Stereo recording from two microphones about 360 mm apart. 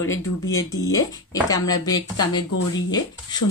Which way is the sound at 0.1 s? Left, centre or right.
Centre.